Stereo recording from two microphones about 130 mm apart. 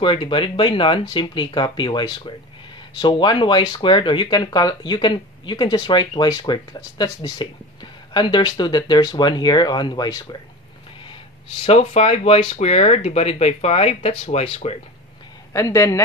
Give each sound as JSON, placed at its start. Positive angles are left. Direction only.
{"t": 0.0, "sound": "speech", "side_deg": 40}
{"t": 11.1, "sound": "speech", "side_deg": 45}
{"t": 15.5, "sound": "speech", "side_deg": 25}